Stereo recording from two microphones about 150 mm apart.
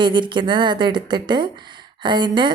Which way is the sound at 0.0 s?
30° right (ahead or behind).